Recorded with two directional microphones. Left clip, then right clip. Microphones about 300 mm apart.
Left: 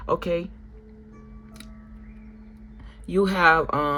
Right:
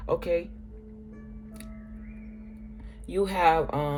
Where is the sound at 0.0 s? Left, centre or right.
Left.